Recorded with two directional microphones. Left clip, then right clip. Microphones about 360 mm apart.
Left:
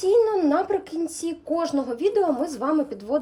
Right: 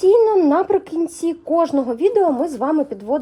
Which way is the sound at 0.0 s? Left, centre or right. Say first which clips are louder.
Right 6 dB; centre.